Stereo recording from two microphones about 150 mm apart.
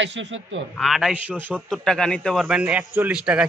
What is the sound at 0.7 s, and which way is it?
Speech, centre (ahead or behind).